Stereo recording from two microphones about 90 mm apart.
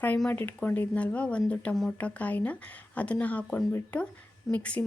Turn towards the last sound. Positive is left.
turn(degrees=15)  # may be behind; listen again after turning